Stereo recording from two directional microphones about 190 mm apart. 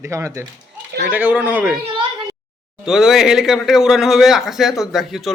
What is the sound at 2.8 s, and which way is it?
Speech, 5° right (ahead or behind).